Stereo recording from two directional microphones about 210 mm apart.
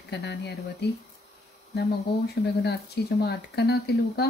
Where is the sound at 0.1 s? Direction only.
50° left (ahead or behind).